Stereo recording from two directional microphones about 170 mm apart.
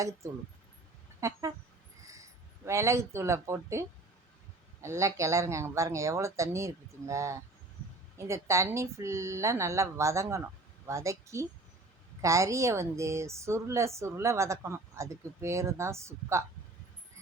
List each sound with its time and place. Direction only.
1.2 s a woman's voice: 20° right (ahead or behind)
2.6 s a woman's voice: 15° right (ahead or behind)